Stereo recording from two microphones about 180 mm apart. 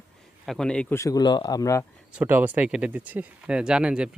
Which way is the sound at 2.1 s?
10° right (ahead or behind).